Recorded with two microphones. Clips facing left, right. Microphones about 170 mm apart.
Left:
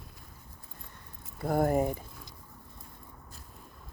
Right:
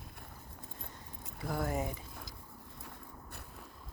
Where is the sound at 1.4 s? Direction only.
55° left (ahead or behind).